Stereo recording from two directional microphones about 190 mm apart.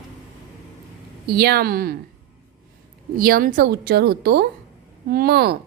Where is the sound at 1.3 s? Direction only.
55° right (ahead or behind).